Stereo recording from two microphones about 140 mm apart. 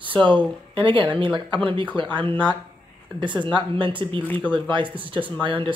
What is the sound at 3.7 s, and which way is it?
Speech, 35° right (ahead or behind).